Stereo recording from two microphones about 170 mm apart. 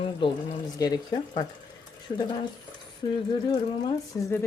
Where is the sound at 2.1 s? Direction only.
40° left (ahead or behind).